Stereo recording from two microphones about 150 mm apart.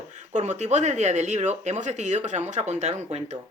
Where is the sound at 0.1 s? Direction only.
50° right (ahead or behind).